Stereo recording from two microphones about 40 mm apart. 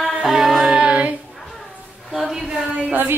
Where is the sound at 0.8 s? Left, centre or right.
Right.